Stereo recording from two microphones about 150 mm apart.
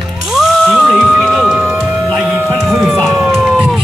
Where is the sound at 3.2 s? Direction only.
10° right (ahead or behind).